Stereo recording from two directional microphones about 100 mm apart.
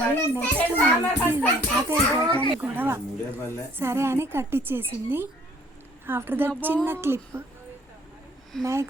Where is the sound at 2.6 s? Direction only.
20° right (ahead or behind).